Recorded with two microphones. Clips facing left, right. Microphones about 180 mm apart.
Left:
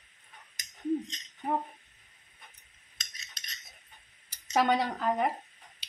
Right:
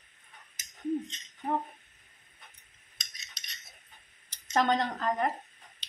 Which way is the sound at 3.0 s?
Centre (ahead or behind).